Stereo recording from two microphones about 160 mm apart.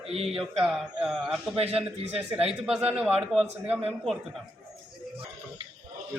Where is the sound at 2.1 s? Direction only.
40° right (ahead or behind).